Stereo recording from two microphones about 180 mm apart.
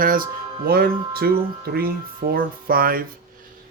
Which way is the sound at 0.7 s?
60° right (ahead or behind).